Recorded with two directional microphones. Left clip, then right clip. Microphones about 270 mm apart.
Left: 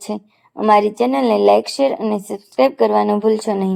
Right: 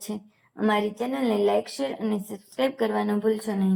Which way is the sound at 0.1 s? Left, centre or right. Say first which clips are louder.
Left 11 dB; left.